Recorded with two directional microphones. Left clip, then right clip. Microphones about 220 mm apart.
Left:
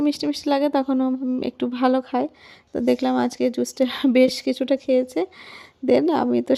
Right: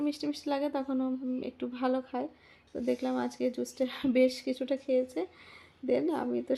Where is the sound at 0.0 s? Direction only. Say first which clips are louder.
Left 11 dB; 45° left (ahead or behind).